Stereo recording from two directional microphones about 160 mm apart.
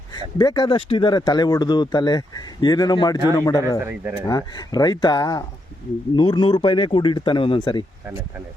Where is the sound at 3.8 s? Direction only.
15° right (ahead or behind).